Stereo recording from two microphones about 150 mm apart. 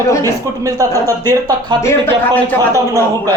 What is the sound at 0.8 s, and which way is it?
Speech, 25° right (ahead or behind).